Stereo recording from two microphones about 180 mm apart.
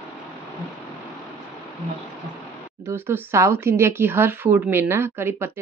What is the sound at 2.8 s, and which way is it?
Speech, 15° right (ahead or behind).